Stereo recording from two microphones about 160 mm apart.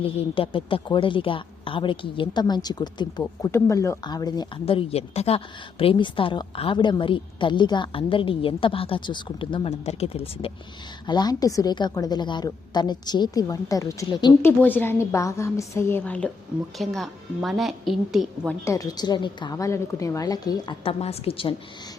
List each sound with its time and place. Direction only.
0.0 s a woman's voice: 35° left (ahead or behind)
11.0 s a woman's voice: 25° left (ahead or behind)
14.4 s a woman's voice: 10° left (ahead or behind)
18.6 s a woman's voice: 20° left (ahead or behind)
20.8 s a woman's voice: 40° left (ahead or behind)